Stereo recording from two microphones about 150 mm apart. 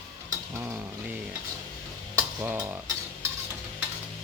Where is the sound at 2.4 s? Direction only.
10° right (ahead or behind).